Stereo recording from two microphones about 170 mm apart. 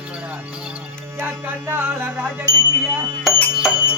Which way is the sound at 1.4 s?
10° right (ahead or behind).